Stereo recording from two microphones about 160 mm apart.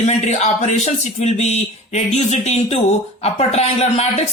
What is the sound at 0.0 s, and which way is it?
Speech, 45° left (ahead or behind).